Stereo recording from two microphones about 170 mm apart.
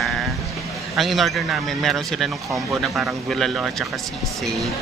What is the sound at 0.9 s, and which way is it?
Speech, centre (ahead or behind).